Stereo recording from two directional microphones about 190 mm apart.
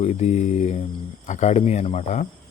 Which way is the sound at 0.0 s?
35° left (ahead or behind).